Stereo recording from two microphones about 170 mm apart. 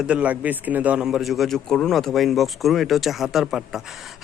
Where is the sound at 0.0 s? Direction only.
5° right (ahead or behind).